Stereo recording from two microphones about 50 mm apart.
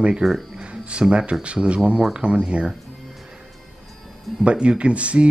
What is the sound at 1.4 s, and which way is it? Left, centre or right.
Speech, right.